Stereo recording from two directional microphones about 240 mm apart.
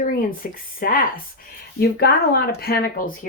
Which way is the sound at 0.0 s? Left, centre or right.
Left.